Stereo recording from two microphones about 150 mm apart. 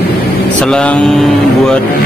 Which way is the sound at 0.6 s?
5° left (ahead or behind).